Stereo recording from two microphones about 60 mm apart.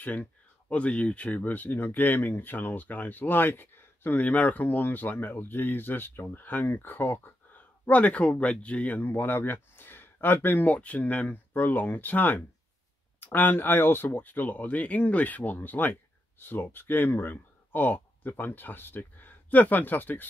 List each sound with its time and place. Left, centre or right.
0.0 s speech: left
4.2 s speech: left
9.0 s speech: left